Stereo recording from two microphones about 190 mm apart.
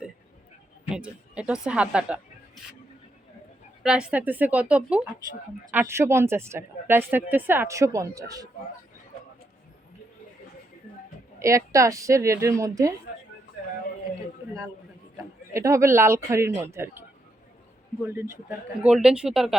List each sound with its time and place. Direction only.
0.9 s speech: 5° right (ahead or behind)
3.8 s speech: 5° right (ahead or behind)
11.3 s speech: 15° right (ahead or behind)
15.2 s speech: 15° right (ahead or behind)
18.0 s speech: 10° right (ahead or behind)